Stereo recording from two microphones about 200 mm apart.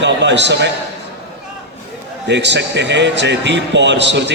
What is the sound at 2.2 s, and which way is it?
A man's voice, 60° right (ahead or behind).